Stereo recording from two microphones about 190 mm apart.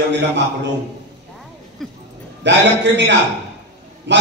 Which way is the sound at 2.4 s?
70° right (ahead or behind).